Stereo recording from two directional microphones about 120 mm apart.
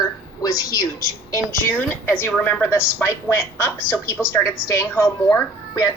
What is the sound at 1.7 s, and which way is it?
A woman's voice, 15° left (ahead or behind).